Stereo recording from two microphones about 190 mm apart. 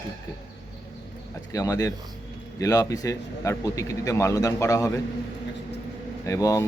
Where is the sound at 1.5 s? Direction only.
15° left (ahead or behind).